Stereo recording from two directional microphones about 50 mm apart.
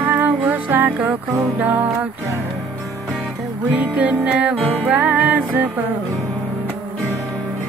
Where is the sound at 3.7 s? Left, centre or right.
Right.